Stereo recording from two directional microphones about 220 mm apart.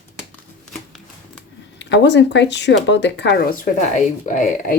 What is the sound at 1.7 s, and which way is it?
Speech, 50° left (ahead or behind).